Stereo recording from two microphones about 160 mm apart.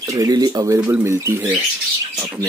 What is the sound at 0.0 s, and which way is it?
Speech, 20° right (ahead or behind).